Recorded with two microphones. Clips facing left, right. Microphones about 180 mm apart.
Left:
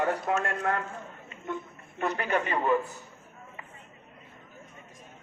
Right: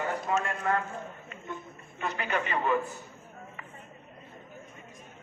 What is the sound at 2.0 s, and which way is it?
Speech, 50° left (ahead or behind).